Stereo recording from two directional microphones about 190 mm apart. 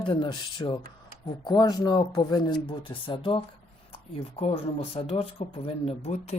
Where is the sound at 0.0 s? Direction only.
25° left (ahead or behind).